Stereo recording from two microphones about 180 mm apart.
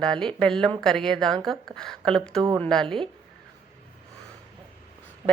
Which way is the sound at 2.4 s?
25° right (ahead or behind).